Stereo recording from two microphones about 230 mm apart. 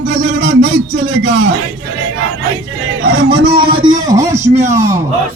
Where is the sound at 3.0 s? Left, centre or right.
Right.